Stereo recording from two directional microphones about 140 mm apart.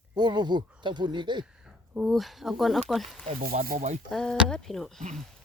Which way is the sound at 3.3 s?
90° right.